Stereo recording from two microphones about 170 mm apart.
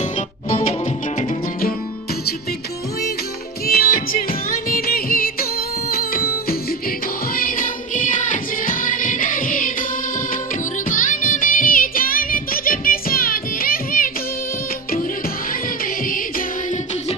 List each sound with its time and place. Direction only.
0.0 s music: 35° left (ahead or behind)
3.6 s music: 60° left (ahead or behind)
7.3 s music: 55° left (ahead or behind)
10.9 s music: 50° left (ahead or behind)
15.8 s music: 55° left (ahead or behind)